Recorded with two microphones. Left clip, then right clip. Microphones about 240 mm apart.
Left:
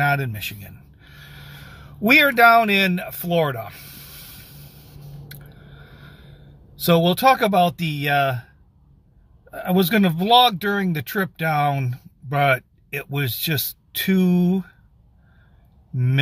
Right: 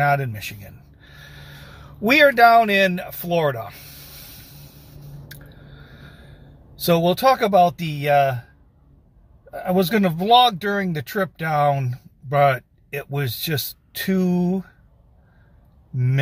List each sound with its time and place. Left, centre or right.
0.0 s speech: centre
5.3 s a sound: centre
9.5 s speech: centre